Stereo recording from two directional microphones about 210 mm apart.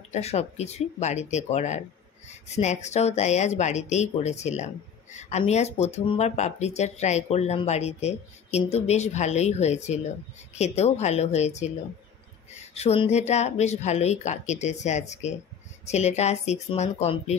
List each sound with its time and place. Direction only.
0.1 s speech: 30° left (ahead or behind)